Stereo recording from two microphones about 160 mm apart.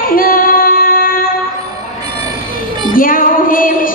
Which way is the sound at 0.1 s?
65° left (ahead or behind).